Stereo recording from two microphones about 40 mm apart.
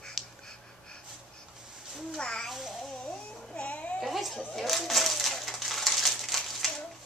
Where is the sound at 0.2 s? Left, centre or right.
Centre.